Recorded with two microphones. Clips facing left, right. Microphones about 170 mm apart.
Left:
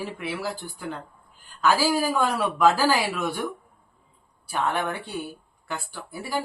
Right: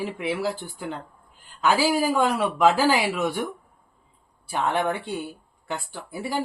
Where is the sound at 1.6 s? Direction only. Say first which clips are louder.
Right 1 dB; 20° right (ahead or behind).